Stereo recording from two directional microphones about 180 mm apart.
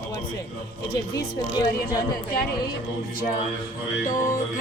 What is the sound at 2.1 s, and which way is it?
Speech, 60° left (ahead or behind).